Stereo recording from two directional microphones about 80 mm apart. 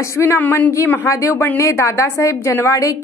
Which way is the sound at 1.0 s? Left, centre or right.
Left.